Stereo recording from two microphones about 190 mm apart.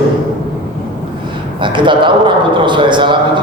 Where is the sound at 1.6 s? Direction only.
25° right (ahead or behind).